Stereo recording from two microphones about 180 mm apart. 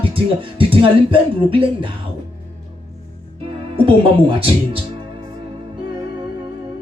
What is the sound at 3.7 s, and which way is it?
Speech, 30° right (ahead or behind).